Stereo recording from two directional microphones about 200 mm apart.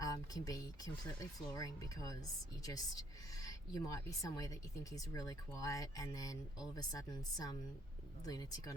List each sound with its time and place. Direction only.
0.0 s a woman's voice: 20° left (ahead or behind)